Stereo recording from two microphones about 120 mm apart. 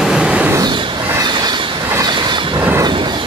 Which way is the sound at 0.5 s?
40° right (ahead or behind).